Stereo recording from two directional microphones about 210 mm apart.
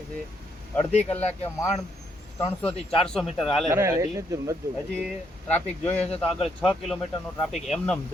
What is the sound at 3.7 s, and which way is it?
Speech, 15° right (ahead or behind).